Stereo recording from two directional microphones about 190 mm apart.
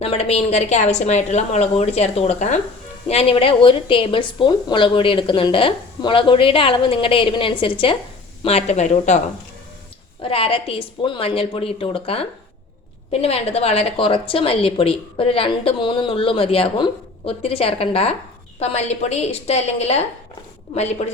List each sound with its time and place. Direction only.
0.0 s a woman's voice: 30° left (ahead or behind)
10.2 s a woman's voice: 30° left (ahead or behind)